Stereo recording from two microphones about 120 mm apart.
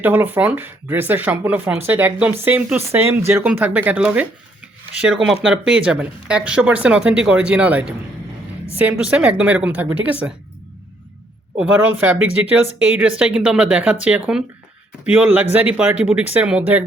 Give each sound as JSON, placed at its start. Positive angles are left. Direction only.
{"t": 0.0, "sound": "speech", "side_deg": -15}
{"t": 11.6, "sound": "speech", "side_deg": -10}